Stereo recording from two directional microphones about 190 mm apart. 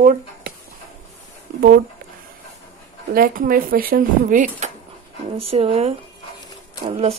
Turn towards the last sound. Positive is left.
turn(degrees=-35)  # may be behind; listen again after turning